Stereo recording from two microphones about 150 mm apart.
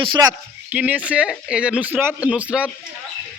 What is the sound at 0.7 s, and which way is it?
Speech, 10° right (ahead or behind).